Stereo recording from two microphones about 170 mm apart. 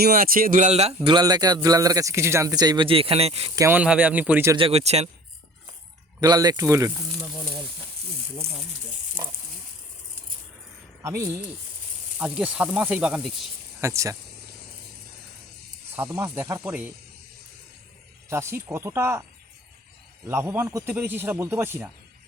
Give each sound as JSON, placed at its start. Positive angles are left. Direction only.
{"t": 0.0, "sound": "speech", "side_deg": -60}
{"t": 1.0, "sound": "speech", "side_deg": -25}
{"t": 3.5, "sound": "speech", "side_deg": -20}
{"t": 3.8, "sound": "speech", "side_deg": -5}
{"t": 4.5, "sound": "speech", "side_deg": -35}
{"t": 6.1, "sound": "speech", "side_deg": -25}
{"t": 11.0, "sound": "speech", "side_deg": -20}
{"t": 12.2, "sound": "speech", "side_deg": -5}
{"t": 13.8, "sound": "speech", "side_deg": -20}
{"t": 16.1, "sound": "speech", "side_deg": -15}
{"t": 18.3, "sound": "speech", "side_deg": -15}
{"t": 20.2, "sound": "speech", "side_deg": -15}